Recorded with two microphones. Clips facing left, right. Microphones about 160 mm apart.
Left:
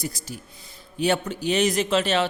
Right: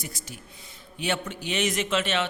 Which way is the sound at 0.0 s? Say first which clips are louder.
Left 7 dB; 35° left (ahead or behind).